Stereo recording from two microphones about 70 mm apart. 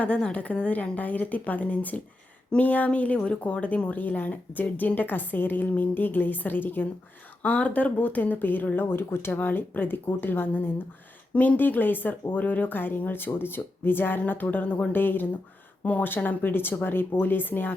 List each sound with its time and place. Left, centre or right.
0.0 s speech: centre